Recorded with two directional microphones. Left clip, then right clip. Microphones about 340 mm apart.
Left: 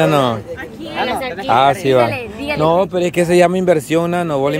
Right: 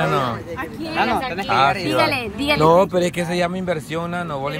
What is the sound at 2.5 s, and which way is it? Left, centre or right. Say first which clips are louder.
Speech: left 1 dB; centre.